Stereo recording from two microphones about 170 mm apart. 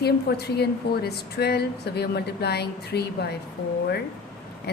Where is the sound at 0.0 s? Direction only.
70° left (ahead or behind).